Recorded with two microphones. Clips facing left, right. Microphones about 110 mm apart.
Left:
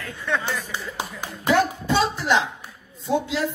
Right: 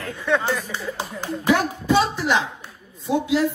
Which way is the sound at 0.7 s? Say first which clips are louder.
Right 2 dB; 15° left (ahead or behind).